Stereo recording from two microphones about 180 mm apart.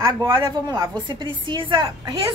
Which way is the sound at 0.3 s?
25° right (ahead or behind).